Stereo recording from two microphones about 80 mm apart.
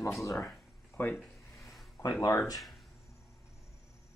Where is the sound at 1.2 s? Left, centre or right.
Centre.